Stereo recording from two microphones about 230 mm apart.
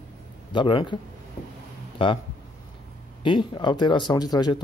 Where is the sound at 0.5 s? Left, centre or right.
Left.